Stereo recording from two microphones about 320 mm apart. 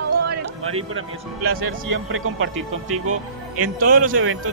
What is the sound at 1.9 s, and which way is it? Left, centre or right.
Music, right.